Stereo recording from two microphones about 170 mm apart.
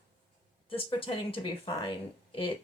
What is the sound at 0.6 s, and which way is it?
Speech, 30° left (ahead or behind).